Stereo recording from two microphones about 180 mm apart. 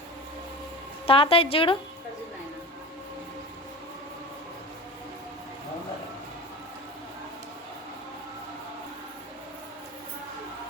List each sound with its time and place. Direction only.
1.0 s a woman's voice: 30° left (ahead or behind)